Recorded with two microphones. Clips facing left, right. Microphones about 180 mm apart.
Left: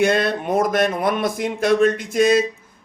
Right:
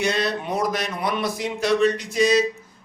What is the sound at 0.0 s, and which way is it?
A man's voice, 55° left (ahead or behind).